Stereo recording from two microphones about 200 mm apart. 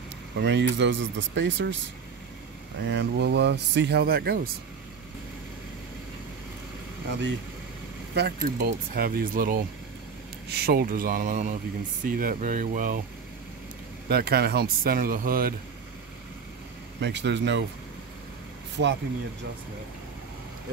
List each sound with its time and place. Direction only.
0.4 s speech: 60° right (ahead or behind)
2.8 s speech: 60° right (ahead or behind)
8.1 s speech: 50° right (ahead or behind)
14.0 s speech: 50° right (ahead or behind)
17.0 s speech: 60° right (ahead or behind)
18.8 s speech: 65° right (ahead or behind)